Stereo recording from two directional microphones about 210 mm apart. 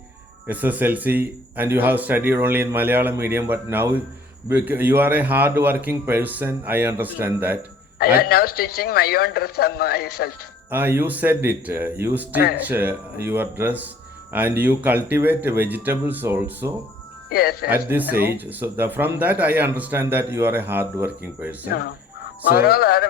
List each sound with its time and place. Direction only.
0.4 s speech: 10° right (ahead or behind)
8.2 s a man's voice: 45° left (ahead or behind)
10.7 s speech: 10° right (ahead or behind)
17.2 s speech: 45° left (ahead or behind)
17.7 s speech: 10° right (ahead or behind)
22.5 s a man's voice: 45° left (ahead or behind)